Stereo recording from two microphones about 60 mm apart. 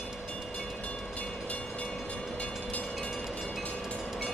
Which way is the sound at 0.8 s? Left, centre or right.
Left.